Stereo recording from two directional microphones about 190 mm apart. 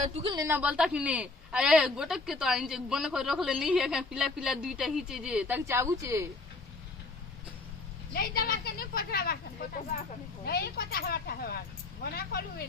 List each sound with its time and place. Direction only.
0.2 s a woman's voice: 20° right (ahead or behind)
0.5 s a woman's voice: 5° right (ahead or behind)
8.1 s speech: 50° left (ahead or behind)